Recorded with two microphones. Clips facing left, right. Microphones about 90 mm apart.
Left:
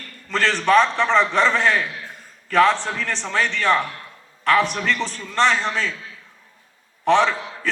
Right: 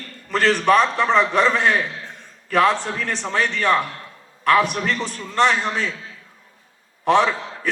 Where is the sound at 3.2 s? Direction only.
35° right (ahead or behind).